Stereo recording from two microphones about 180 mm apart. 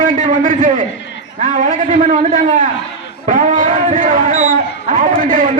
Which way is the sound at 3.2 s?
45° right (ahead or behind).